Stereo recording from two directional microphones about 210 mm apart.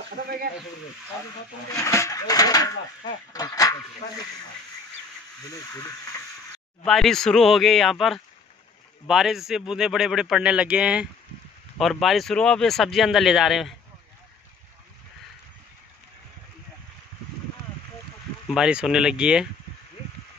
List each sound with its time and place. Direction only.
1.7 s speech: 15° left (ahead or behind)
4.0 s speech: 30° left (ahead or behind)
6.8 s speech: centre (ahead or behind)
18.5 s speech: 5° right (ahead or behind)